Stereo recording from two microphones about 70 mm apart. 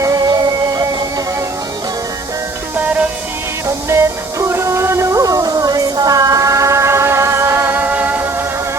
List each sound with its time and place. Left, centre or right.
0.0 s music: right
2.7 s music: right
3.8 s music: right
7.8 s music: right